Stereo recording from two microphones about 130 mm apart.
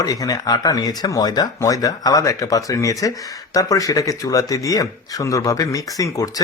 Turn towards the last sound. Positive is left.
turn(degrees=25)  # may be behind; listen again after turning